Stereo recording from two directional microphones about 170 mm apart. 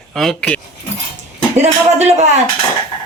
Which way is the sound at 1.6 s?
40° right (ahead or behind).